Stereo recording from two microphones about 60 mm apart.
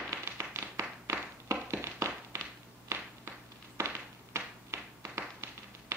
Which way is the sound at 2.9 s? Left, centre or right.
Right.